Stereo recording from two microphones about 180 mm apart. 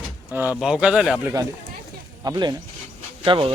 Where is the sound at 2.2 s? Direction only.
20° right (ahead or behind).